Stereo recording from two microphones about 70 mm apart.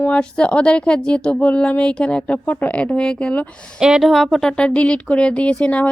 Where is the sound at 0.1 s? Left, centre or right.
Centre.